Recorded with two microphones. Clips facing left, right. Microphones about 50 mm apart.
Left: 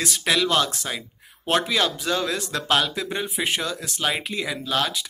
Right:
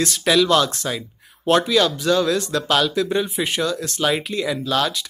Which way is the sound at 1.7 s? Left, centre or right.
Left.